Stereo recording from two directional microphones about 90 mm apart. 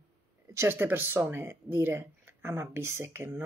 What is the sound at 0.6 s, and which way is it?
Speech, 25° right (ahead or behind).